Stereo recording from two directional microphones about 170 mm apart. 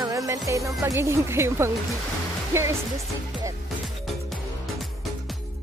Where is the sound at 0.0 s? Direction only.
20° right (ahead or behind).